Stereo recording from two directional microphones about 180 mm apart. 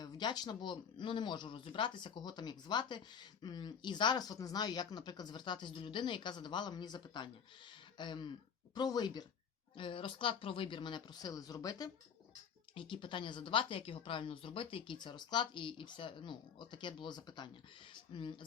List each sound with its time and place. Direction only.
0.0 s speech: 25° left (ahead or behind)